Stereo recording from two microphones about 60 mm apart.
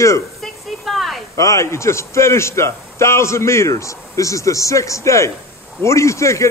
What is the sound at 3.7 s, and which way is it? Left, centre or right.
Speech, left.